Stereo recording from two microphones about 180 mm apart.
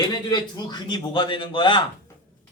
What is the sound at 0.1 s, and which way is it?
A man's voice, 20° left (ahead or behind).